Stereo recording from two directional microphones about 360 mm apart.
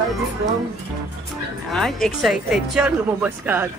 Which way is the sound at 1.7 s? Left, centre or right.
Centre.